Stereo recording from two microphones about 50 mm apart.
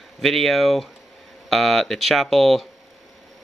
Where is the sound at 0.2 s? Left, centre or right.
Centre.